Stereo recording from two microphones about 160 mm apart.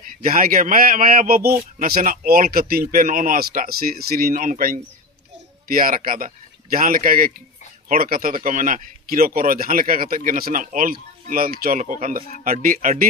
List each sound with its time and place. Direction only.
0.2 s speech: 60° right (ahead or behind)